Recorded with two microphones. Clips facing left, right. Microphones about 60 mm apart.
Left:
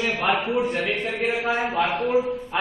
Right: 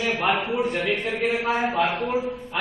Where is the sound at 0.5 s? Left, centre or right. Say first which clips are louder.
Even; centre.